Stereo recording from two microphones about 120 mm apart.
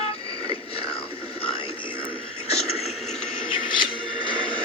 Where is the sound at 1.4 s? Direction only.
50° left (ahead or behind).